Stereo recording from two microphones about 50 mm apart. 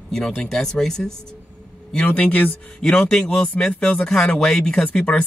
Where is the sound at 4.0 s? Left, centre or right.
Centre.